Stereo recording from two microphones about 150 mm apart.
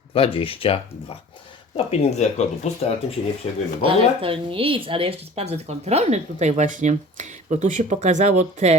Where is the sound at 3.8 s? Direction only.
35° right (ahead or behind).